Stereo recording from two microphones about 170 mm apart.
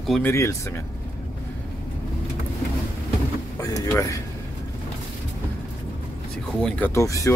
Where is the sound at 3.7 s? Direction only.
20° left (ahead or behind).